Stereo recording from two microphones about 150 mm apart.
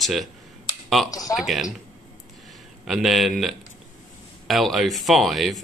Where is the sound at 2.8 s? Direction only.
Centre (ahead or behind).